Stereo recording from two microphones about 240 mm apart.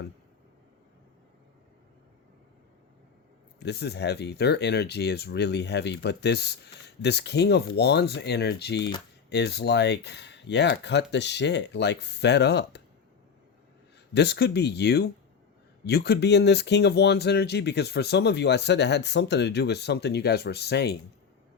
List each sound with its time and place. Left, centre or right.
3.6 s speech: left
14.1 s speech: left